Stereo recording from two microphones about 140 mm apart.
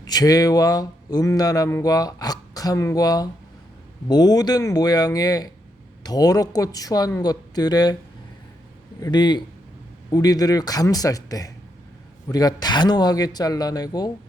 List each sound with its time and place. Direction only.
0.0 s speech: 25° left (ahead or behind)
9.0 s a man's voice: 30° left (ahead or behind)